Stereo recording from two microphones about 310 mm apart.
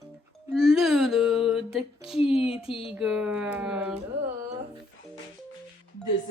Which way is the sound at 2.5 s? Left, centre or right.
Centre.